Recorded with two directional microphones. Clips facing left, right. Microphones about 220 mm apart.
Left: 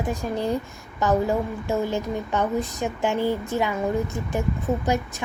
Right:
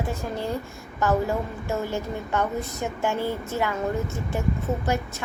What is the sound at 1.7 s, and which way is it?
A woman's voice, 15° left (ahead or behind).